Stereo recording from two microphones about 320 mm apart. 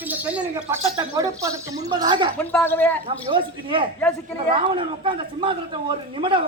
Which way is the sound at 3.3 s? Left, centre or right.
Centre.